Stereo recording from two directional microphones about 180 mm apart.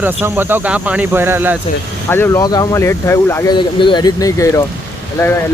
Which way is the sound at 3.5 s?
25° left (ahead or behind).